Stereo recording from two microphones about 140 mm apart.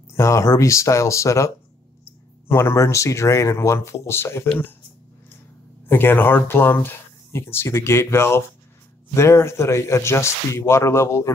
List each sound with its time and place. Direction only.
0.1 s speech: 20° left (ahead or behind)
5.9 s speech: 15° left (ahead or behind)